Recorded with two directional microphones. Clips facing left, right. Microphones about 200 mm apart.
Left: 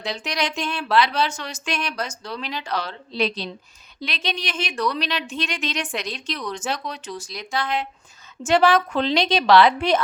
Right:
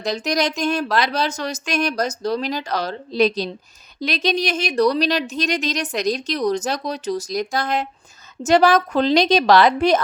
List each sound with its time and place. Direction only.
0.0 s speech: 40° right (ahead or behind)